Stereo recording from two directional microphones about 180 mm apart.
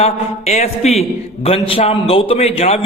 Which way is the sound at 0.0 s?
40° left (ahead or behind).